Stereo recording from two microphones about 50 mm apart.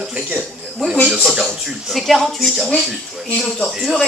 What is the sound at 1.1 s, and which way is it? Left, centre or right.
Speech, centre.